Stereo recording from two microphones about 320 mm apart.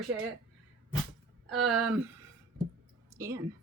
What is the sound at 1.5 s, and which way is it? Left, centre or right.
Speech, right.